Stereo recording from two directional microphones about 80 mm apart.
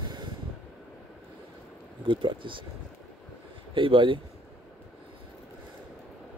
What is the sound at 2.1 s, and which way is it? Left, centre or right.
Speech, right.